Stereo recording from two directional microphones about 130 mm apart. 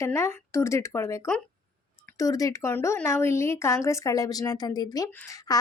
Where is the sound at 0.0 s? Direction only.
20° left (ahead or behind).